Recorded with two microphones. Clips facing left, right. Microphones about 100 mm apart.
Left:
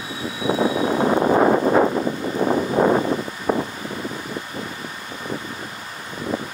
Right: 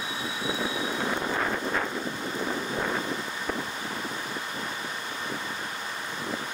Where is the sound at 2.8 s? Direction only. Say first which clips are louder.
Left 15 dB; 40° left (ahead or behind).